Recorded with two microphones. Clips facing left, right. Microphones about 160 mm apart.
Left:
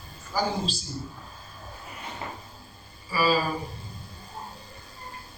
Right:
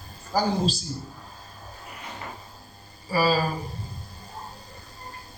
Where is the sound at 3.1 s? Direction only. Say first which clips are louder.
Right 2 dB; 40° right (ahead or behind).